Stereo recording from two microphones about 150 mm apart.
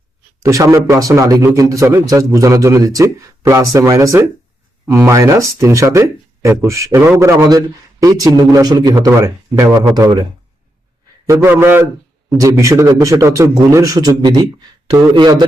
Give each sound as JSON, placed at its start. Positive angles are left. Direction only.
{"t": 0.4, "sound": "speech", "side_deg": -20}
{"t": 11.3, "sound": "a man's voice", "side_deg": -15}